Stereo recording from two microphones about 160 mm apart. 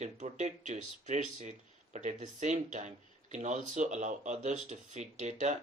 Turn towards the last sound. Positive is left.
turn(degrees=-50)  # may be behind; listen again after turning